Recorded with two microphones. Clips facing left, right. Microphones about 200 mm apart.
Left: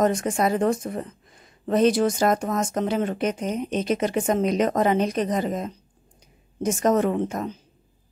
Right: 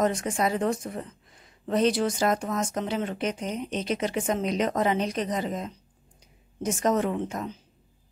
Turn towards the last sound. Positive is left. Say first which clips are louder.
# left 5 dB
turn(degrees=45)  # may be behind; listen again after turning